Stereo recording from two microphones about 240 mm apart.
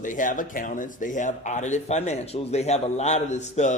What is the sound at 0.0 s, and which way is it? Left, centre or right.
Speech, left.